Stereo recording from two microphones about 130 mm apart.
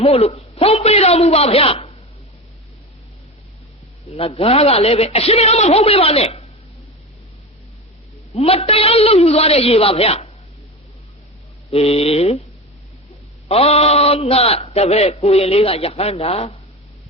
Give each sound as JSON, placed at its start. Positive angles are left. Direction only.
{"t": 0.0, "sound": "a man's voice", "side_deg": 50}
{"t": 4.1, "sound": "a man's voice", "side_deg": 45}
{"t": 8.4, "sound": "a man's voice", "side_deg": 50}
{"t": 11.7, "sound": "a man's voice", "side_deg": 50}
{"t": 13.5, "sound": "a man's voice", "side_deg": 50}